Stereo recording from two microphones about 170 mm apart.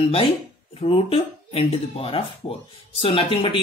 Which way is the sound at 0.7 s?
30° left (ahead or behind).